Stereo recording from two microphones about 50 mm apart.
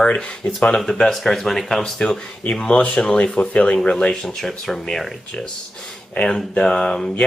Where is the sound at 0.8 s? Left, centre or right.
Centre.